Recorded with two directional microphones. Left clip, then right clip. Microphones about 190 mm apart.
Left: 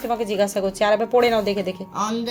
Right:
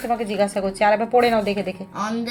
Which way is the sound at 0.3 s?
10° left (ahead or behind).